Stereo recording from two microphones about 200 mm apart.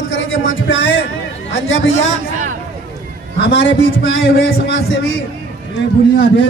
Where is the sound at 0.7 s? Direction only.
60° left (ahead or behind).